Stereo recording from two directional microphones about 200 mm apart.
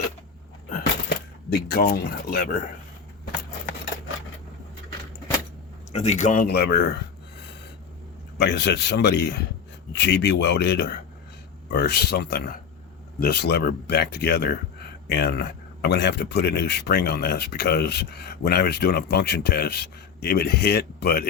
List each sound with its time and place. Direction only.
0.7 s a sound: 50° left (ahead or behind)
5.9 s speech: 35° left (ahead or behind); by 6.8 s 55° left (ahead or behind)
8.4 s speech: 60° left (ahead or behind)